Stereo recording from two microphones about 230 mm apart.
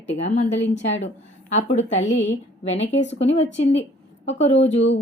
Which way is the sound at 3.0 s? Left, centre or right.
Left.